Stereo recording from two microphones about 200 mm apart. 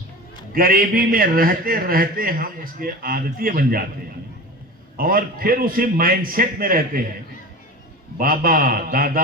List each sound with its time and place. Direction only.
0.5 s a man's voice: 45° right (ahead or behind)
4.9 s a man's voice: 45° right (ahead or behind)
8.2 s a man's voice: 45° right (ahead or behind)